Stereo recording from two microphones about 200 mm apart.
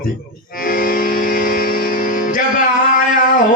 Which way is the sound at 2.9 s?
45° left (ahead or behind).